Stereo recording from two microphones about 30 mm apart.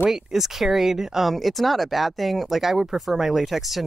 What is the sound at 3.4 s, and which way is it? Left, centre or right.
Speech, centre.